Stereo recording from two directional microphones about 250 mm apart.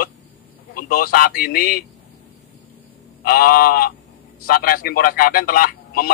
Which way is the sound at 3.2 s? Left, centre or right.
Left.